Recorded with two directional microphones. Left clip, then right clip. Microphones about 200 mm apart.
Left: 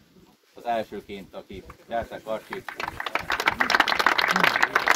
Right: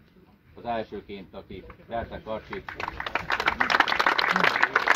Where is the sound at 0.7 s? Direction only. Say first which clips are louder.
Left 3 dB; 15° left (ahead or behind).